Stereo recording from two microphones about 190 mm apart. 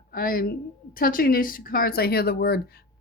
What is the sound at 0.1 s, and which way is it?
Speech, 50° left (ahead or behind).